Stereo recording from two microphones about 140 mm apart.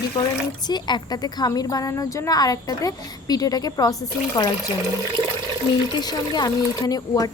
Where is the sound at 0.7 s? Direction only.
30° left (ahead or behind).